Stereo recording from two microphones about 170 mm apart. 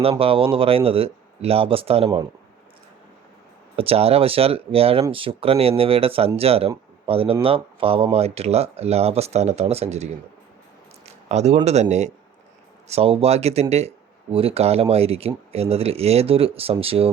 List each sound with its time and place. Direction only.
0.0 s speech: 35° right (ahead or behind)
3.8 s speech: 35° right (ahead or behind)